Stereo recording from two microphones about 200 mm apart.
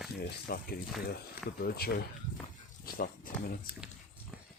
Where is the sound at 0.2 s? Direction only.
50° left (ahead or behind).